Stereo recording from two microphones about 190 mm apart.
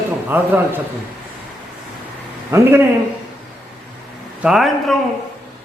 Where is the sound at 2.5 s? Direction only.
15° right (ahead or behind).